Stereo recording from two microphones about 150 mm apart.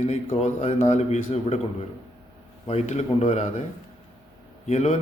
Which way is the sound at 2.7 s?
45° left (ahead or behind).